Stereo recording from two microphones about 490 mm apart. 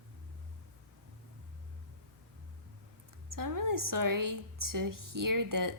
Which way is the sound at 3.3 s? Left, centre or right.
Right.